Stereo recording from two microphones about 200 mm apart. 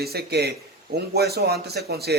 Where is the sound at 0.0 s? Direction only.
55° right (ahead or behind).